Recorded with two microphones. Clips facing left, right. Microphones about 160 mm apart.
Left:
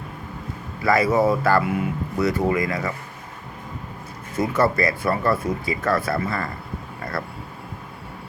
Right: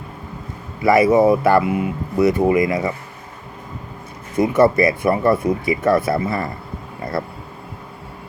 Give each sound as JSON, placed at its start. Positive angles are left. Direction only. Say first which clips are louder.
{"t": 0.8, "sound": "speech", "louder": "right 6 dB", "side_deg": -20}
{"t": 4.4, "sound": "speech", "louder": "right 6 dB", "side_deg": -20}